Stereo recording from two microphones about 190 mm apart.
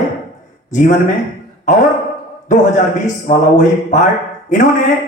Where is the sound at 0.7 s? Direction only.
40° left (ahead or behind).